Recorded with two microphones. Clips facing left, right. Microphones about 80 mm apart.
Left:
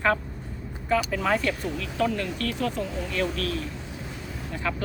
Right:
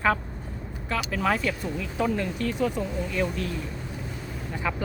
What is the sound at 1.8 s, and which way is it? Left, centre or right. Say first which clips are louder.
Speech: right 1 dB; centre.